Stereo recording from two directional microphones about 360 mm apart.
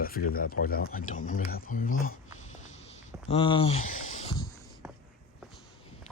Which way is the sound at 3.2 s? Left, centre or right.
Centre.